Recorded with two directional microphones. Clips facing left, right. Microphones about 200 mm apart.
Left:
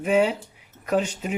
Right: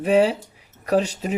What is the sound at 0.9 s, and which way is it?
Speech, 35° right (ahead or behind).